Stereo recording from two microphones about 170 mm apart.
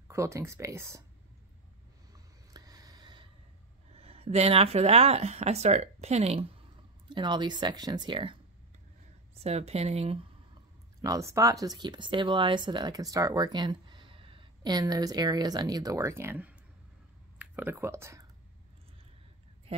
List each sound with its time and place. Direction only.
0.1 s speech: 15° right (ahead or behind)
2.5 s a sound: 25° right (ahead or behind)
3.9 s speech: 35° right (ahead or behind)
7.1 s speech: 25° right (ahead or behind)
11.0 s speech: 20° right (ahead or behind)